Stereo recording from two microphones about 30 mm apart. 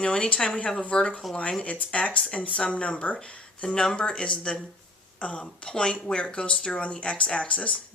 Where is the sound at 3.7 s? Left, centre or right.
Left.